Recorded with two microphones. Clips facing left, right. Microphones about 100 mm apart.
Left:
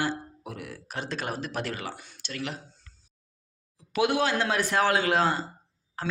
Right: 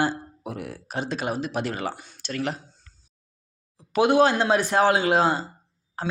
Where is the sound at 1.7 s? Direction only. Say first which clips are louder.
Right 6 dB; 30° right (ahead or behind).